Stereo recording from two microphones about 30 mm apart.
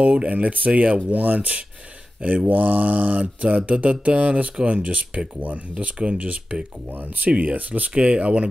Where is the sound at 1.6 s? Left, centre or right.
Right.